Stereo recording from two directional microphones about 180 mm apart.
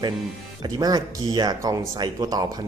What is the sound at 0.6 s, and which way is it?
Speech, 20° right (ahead or behind).